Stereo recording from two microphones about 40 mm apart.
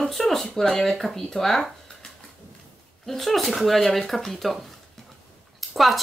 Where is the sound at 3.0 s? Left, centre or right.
Centre.